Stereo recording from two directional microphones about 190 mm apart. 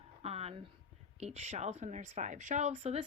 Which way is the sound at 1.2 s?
35° right (ahead or behind).